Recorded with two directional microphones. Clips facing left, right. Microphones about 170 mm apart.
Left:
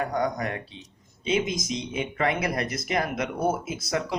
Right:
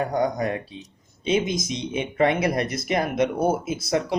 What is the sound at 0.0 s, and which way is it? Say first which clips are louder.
Speech: right 4 dB; 30° right (ahead or behind).